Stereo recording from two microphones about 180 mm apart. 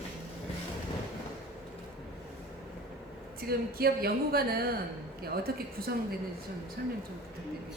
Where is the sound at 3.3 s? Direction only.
55° right (ahead or behind).